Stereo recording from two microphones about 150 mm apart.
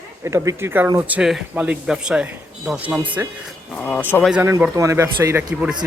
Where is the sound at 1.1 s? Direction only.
5° right (ahead or behind).